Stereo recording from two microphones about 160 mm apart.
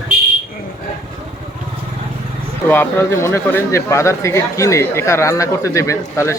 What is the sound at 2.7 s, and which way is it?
A man's voice, 15° left (ahead or behind).